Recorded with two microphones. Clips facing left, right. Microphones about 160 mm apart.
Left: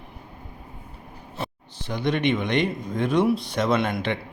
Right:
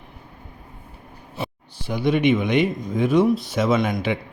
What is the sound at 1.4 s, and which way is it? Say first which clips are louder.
Speech: right 2 dB; 10° right (ahead or behind).